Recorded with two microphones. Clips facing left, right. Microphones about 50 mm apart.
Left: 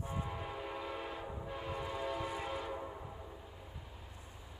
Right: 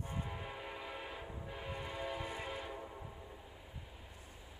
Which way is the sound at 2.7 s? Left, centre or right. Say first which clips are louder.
Left 4 dB; centre.